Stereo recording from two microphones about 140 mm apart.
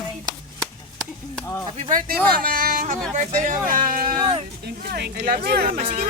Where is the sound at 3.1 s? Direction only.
60° right (ahead or behind).